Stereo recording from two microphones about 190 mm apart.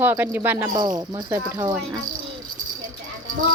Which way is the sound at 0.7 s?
20° right (ahead or behind).